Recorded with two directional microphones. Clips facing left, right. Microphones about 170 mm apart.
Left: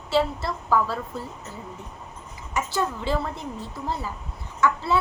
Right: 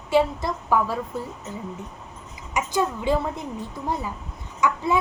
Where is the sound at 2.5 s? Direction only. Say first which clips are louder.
Right 2 dB; 15° right (ahead or behind).